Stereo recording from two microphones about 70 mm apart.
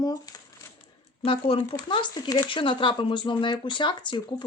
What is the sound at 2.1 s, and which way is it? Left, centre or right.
Speech, left.